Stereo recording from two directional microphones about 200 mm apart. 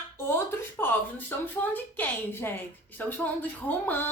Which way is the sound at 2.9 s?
10° left (ahead or behind).